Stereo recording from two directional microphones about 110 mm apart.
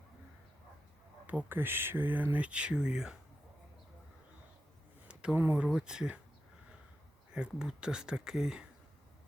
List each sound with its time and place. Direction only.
1.3 s speech: 15° right (ahead or behind)
5.0 s a sound: 10° right (ahead or behind)
5.6 s speech: 5° right (ahead or behind)
7.3 s speech: 5° right (ahead or behind)